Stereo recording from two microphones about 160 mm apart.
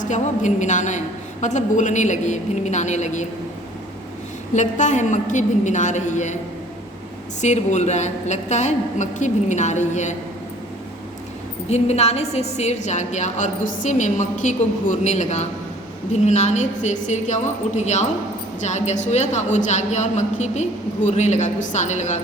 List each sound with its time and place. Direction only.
0.0 s a woman's voice: 50° left (ahead or behind)
4.5 s a woman's voice: 50° left (ahead or behind)
7.4 s a woman's voice: 45° left (ahead or behind)
11.7 s a woman's voice: 40° left (ahead or behind)